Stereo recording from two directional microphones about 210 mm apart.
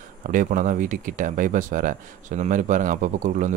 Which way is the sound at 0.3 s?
40° right (ahead or behind).